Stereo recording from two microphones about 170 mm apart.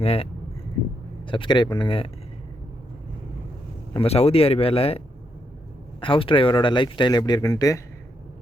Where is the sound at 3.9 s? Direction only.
35° left (ahead or behind); by 7.8 s 20° left (ahead or behind).